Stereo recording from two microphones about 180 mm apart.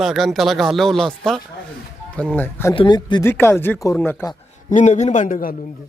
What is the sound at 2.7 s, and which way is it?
Speech, 25° left (ahead or behind).